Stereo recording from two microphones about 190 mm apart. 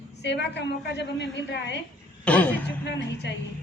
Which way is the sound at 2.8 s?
65° left (ahead or behind).